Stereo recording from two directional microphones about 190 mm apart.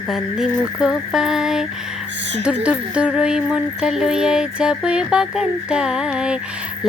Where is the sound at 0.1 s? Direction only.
5° right (ahead or behind).